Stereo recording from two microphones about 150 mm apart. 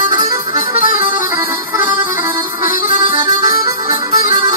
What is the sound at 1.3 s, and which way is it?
Music, 15° right (ahead or behind).